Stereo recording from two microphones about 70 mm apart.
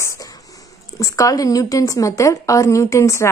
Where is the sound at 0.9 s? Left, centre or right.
Left.